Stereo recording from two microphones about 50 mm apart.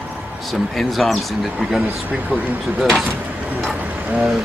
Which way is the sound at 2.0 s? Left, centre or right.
Right.